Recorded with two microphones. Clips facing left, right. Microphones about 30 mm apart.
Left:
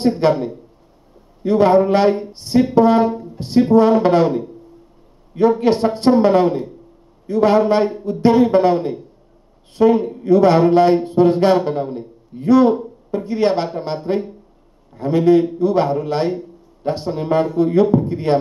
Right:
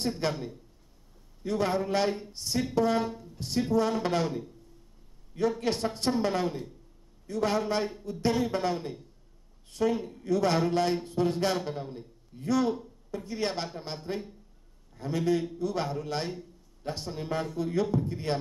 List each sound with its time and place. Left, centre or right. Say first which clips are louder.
0.0 s a man's voice: left 15 dB; left